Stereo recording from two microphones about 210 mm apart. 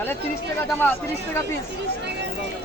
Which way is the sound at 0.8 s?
10° left (ahead or behind).